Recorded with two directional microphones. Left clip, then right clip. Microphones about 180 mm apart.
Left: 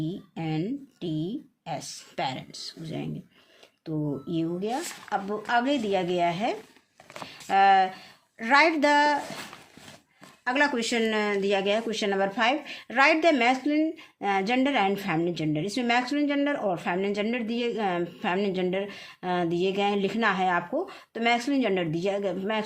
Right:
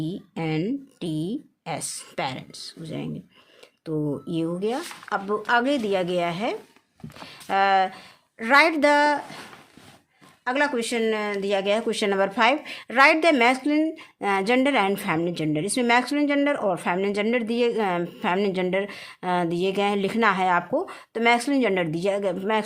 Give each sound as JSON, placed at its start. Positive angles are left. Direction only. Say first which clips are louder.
{"t": 0.0, "sound": "speech", "louder": "right 4 dB", "side_deg": -45}
{"t": 10.4, "sound": "speech", "louder": "right 1 dB", "side_deg": -20}